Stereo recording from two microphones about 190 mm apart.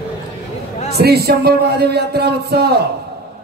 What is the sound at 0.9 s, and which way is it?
Speech, 55° right (ahead or behind).